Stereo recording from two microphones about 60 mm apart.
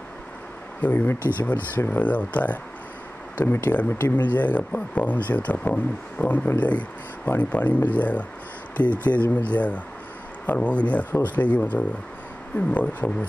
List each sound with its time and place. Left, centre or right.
0.7 s speech: left